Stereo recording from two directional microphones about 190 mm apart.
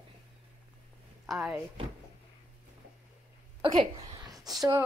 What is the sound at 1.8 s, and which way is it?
Speech, 30° right (ahead or behind).